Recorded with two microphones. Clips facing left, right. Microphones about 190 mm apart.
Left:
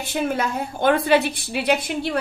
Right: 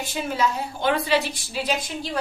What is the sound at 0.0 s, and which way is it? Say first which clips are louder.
A woman's voice: left 2 dB; 60° left (ahead or behind).